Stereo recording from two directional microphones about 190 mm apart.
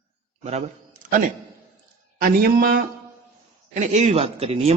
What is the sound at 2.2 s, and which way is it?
Speech, 50° right (ahead or behind).